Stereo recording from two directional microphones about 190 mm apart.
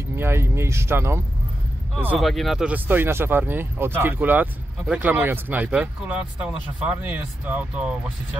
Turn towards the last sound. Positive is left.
turn(degrees=-5)  # may be behind; listen again after turning